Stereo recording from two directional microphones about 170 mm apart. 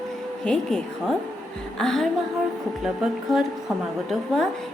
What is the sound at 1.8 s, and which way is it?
A woman's voice, 5° left (ahead or behind).